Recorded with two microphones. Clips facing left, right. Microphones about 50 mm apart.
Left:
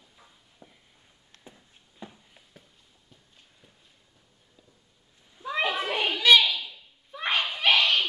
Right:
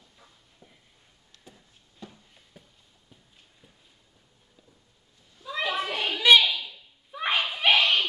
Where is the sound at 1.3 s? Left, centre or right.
Left.